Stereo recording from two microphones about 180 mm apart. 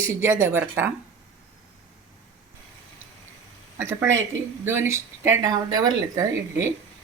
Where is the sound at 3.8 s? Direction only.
15° right (ahead or behind).